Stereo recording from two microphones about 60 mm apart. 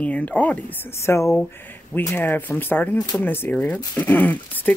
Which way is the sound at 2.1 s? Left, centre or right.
Left.